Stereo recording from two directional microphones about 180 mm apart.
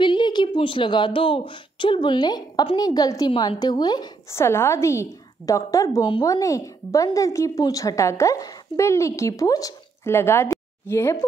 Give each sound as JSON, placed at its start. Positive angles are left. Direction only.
{"t": 0.0, "sound": "a woman's voice", "side_deg": 25}